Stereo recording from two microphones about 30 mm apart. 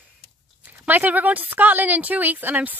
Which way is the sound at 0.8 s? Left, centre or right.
Right.